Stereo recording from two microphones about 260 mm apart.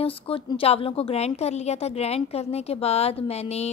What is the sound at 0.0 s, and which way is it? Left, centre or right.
A woman's voice, left.